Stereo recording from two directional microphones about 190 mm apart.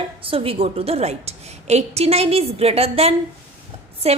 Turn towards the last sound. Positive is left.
turn(degrees=-30)  # may be behind; listen again after turning